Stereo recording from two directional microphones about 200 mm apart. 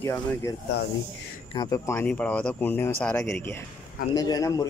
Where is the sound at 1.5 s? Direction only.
25° left (ahead or behind).